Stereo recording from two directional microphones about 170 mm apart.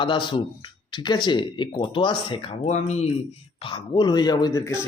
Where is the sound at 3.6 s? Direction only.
25° left (ahead or behind).